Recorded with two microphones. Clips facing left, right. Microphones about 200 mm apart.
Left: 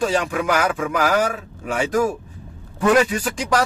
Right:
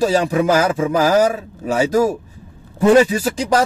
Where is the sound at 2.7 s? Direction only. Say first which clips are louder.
Right 5 dB; 25° right (ahead or behind).